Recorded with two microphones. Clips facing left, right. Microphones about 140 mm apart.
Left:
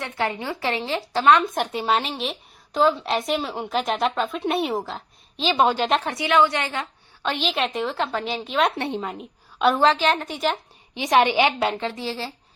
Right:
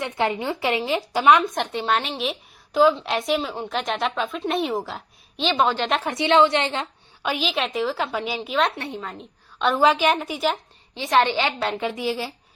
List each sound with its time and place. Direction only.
0.0 s speech: 20° right (ahead or behind)
1.4 s a woman's voice: 5° left (ahead or behind)
2.7 s a woman's voice: centre (ahead or behind)
5.5 s a woman's voice: 15° left (ahead or behind)
6.1 s a woman's voice: 25° right (ahead or behind)
7.2 s a woman's voice: 5° right (ahead or behind)
8.7 s a woman's voice: 25° left (ahead or behind)
9.0 s a woman's voice: 5° left (ahead or behind)
9.8 s speech: 10° right (ahead or behind)
10.9 s a woman's voice: 15° left (ahead or behind)
11.8 s speech: 15° right (ahead or behind)